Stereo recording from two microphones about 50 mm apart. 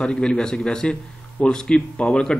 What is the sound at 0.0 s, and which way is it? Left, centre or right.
A man's voice, centre.